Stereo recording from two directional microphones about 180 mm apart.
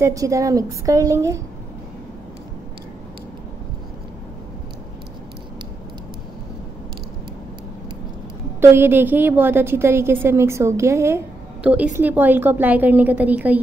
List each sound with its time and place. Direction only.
0.0 s a woman's voice: 20° right (ahead or behind)
8.5 s a woman's voice: 10° right (ahead or behind)